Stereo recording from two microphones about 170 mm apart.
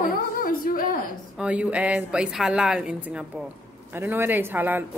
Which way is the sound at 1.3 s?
5° right (ahead or behind).